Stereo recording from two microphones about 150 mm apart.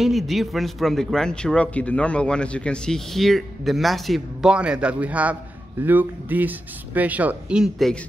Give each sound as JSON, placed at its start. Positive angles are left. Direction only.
{"t": 0.0, "sound": "speech", "side_deg": 0}